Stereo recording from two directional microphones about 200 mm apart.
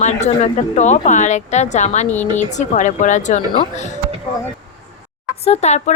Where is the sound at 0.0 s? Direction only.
35° left (ahead or behind).